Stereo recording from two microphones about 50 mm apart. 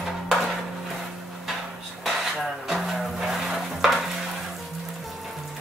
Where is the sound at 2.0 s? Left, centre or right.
Centre.